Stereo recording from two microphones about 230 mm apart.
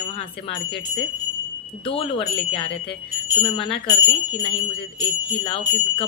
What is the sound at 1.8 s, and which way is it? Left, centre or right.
A man's voice, left.